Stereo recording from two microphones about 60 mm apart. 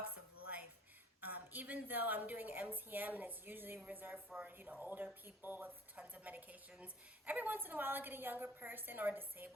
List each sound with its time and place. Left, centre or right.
1.2 s a woman's voice: right